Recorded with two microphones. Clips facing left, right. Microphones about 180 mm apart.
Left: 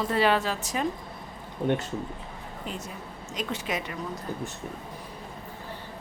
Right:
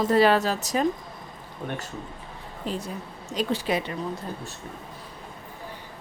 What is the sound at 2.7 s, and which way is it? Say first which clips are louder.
A woman's voice: right 7 dB; 35° right (ahead or behind).